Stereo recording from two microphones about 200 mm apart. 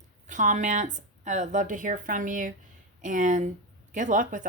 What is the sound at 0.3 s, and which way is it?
Speech, 40° right (ahead or behind).